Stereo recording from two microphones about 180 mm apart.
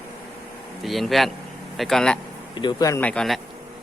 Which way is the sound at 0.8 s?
Centre (ahead or behind).